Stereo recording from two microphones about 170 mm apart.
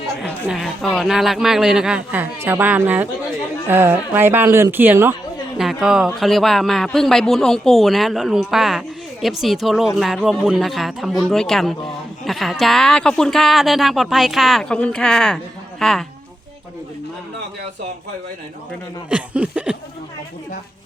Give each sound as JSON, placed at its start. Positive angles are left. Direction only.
{"t": 0.2, "sound": "speech", "side_deg": -5}
{"t": 19.0, "sound": "speech", "side_deg": -5}